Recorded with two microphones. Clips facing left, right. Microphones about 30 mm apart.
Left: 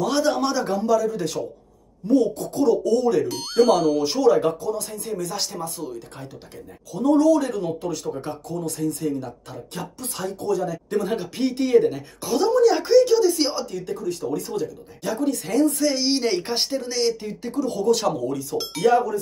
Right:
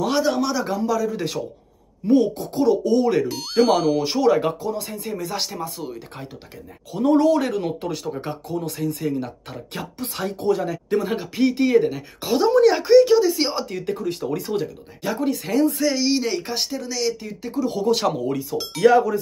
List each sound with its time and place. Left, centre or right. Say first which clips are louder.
0.4 s speech: even; centre
1.0 s speech: even; right
3.3 s speech: even; centre
6.9 s speech: even; right
10.9 s speech: right 3 dB; centre
12.4 s speech: right 2 dB; right
12.9 s speech: right 4 dB; right
13.6 s speech: right 2 dB; right
15.0 s speech: right 1 dB; right
15.3 s speech: even; centre
15.8 s speech: right 1 dB; centre
17.5 s speech: even; centre
18.9 s speech: right 3 dB; right